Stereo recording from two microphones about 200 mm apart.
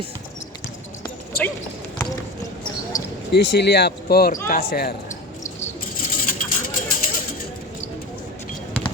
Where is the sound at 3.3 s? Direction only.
55° left (ahead or behind).